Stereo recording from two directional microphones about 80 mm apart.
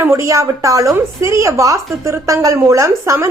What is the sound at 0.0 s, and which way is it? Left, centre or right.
A woman's voice, right.